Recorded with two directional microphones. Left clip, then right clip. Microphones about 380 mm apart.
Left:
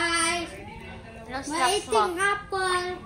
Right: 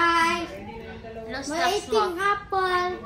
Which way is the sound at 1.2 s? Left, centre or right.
Centre.